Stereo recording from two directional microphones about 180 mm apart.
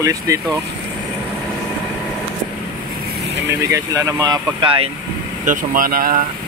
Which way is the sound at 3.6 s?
20° right (ahead or behind).